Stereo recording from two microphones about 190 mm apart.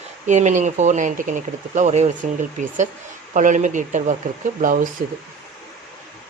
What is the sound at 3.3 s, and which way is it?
Speech, 40° right (ahead or behind).